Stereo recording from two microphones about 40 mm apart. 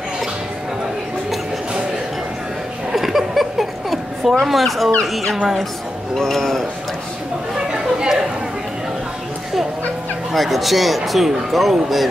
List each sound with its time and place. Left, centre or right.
2.9 s a sound: centre
4.5 s speech: centre
6.1 s a man's voice: centre
7.7 s chatter: centre
10.3 s speech: centre